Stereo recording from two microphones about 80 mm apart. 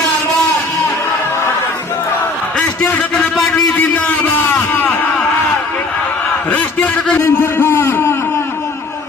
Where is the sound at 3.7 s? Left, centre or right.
Centre.